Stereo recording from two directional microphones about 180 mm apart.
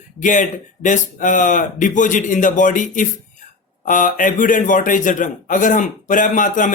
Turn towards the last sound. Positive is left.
turn(degrees=45)  # may be behind; listen again after turning